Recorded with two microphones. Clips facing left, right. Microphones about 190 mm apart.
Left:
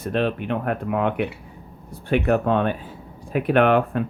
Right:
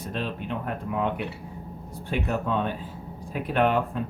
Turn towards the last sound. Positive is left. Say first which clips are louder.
# left 6 dB
turn(degrees=70)  # may be behind; listen again after turning